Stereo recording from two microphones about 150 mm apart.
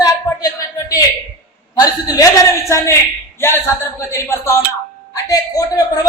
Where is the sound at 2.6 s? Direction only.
20° left (ahead or behind).